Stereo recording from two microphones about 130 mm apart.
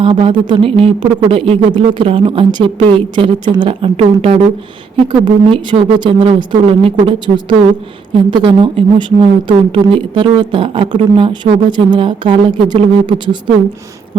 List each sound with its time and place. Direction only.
0.0 s a man's voice: 45° right (ahead or behind)